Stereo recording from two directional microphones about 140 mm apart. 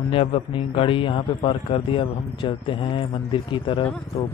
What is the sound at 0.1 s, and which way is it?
A man's voice, 40° left (ahead or behind).